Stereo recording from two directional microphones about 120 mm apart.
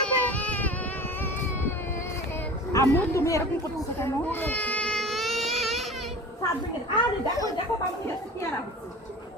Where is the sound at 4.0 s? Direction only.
15° left (ahead or behind); by 5.8 s centre (ahead or behind).